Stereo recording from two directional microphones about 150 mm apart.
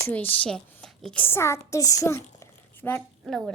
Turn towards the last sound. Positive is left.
turn(degrees=0)  # may be behind; listen again after turning